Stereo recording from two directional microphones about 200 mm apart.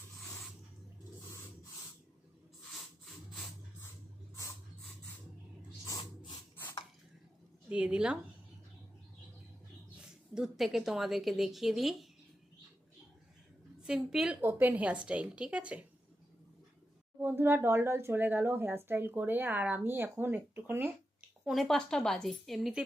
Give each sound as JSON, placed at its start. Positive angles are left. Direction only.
{"t": 0.2, "sound": "spray", "side_deg": 0}
{"t": 5.8, "sound": "a sound", "side_deg": 20}
{"t": 7.7, "sound": "a woman's voice", "side_deg": -5}
{"t": 10.0, "sound": "a woman's voice", "side_deg": -5}
{"t": 13.8, "sound": "speech", "side_deg": -5}
{"t": 17.2, "sound": "speech", "side_deg": -10}